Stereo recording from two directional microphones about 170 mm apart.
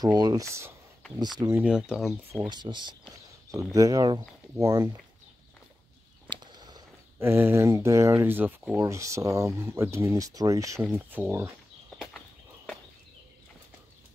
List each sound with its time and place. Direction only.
0.0 s speech: 25° right (ahead or behind)
1.6 s speech: 5° right (ahead or behind)
2.3 s speech: 25° right (ahead or behind)
6.3 s a sound: 25° right (ahead or behind)
7.2 s speech: 15° right (ahead or behind)